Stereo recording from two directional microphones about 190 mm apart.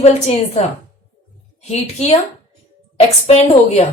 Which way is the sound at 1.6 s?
35° left (ahead or behind).